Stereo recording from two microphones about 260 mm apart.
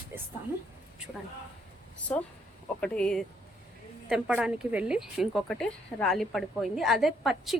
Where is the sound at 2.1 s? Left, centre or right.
Centre.